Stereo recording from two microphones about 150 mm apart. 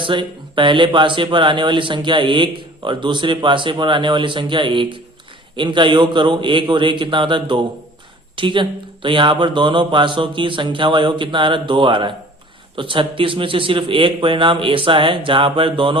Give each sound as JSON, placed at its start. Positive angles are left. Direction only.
{"t": 0.0, "sound": "speech", "side_deg": -35}